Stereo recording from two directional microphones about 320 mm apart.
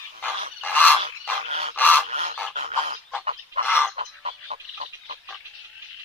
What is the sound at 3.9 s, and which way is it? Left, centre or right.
Frog, right.